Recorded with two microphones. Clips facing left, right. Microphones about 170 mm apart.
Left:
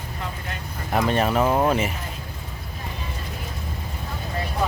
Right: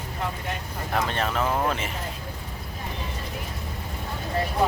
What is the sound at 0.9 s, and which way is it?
Speech, 10° left (ahead or behind).